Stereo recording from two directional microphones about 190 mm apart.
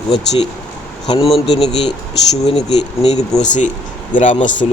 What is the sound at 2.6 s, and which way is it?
Speech, 35° left (ahead or behind).